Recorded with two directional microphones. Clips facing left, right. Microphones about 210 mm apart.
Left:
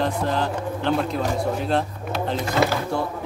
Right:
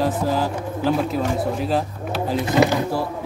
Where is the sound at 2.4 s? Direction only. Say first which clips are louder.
Right 5 dB; 20° right (ahead or behind).